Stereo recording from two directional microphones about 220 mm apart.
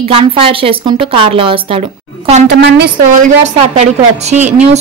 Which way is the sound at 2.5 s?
50° right (ahead or behind).